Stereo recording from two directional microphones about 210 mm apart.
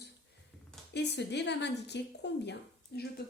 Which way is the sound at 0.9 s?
55° left (ahead or behind).